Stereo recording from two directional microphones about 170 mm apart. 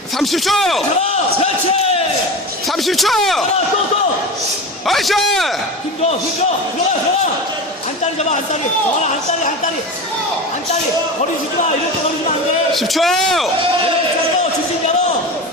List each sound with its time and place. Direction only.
0.2 s speech: centre (ahead or behind)
2.6 s speech: centre (ahead or behind)
4.9 s speech: centre (ahead or behind)
12.7 s speech: centre (ahead or behind)